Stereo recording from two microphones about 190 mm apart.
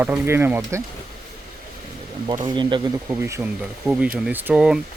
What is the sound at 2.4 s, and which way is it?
Speech, 25° right (ahead or behind).